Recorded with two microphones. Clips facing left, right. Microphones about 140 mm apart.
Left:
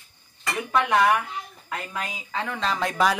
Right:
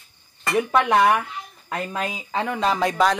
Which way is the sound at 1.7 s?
25° right (ahead or behind).